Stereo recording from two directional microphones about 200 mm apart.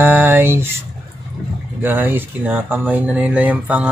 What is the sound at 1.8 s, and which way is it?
Speech, 10° right (ahead or behind).